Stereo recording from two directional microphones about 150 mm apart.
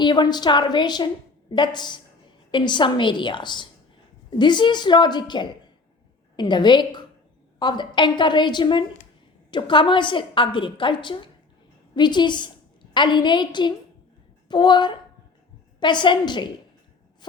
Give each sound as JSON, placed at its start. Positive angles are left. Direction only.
{"t": 0.0, "sound": "a woman's voice", "side_deg": 30}